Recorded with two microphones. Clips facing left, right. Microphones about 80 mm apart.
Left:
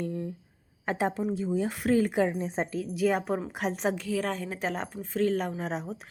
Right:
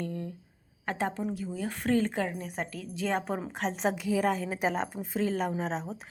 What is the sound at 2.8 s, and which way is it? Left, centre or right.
Speech, centre.